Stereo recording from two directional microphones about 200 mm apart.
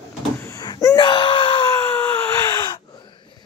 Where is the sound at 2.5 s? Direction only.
20° left (ahead or behind).